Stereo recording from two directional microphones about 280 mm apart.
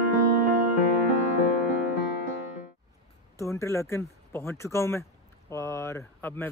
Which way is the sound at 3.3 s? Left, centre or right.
Centre.